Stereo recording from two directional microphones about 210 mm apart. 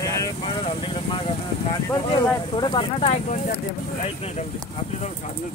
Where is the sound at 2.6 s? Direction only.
25° left (ahead or behind).